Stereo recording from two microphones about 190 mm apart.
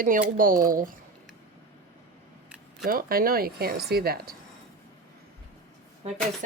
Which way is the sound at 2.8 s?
50° right (ahead or behind).